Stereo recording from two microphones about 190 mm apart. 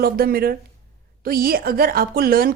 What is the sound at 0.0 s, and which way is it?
A woman's voice, 50° right (ahead or behind).